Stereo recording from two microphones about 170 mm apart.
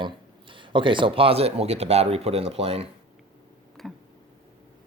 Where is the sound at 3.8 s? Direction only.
Centre (ahead or behind).